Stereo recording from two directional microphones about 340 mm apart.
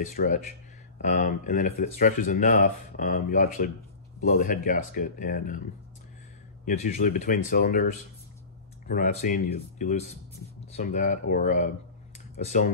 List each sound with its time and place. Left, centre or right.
0.0 s speech: left
6.6 s speech: left
8.8 s speech: left